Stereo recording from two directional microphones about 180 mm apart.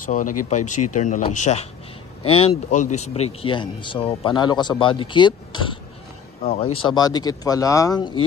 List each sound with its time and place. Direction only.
0.0 s speech: 45° left (ahead or behind); by 8.2 s 25° left (ahead or behind)